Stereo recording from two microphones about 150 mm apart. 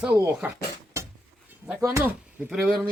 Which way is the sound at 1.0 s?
20° right (ahead or behind).